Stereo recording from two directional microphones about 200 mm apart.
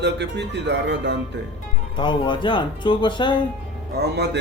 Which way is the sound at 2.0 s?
25° left (ahead or behind).